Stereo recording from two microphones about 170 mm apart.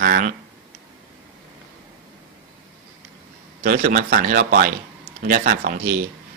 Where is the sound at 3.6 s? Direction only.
50° right (ahead or behind).